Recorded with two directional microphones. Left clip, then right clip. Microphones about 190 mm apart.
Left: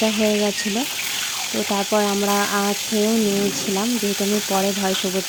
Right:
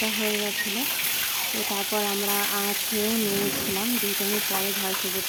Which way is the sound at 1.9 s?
35° left (ahead or behind).